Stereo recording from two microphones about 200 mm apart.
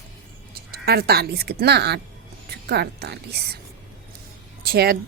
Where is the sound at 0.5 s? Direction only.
50° right (ahead or behind).